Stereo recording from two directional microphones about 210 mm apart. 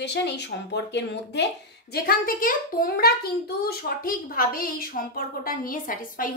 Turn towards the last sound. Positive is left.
turn(degrees=40)  # may be behind; listen again after turning